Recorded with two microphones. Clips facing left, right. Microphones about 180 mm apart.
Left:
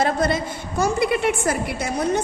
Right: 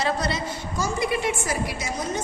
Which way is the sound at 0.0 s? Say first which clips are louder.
Left 5 dB; 50° left (ahead or behind).